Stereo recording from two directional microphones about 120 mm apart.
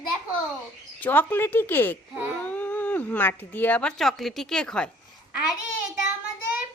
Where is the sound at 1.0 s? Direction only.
15° left (ahead or behind).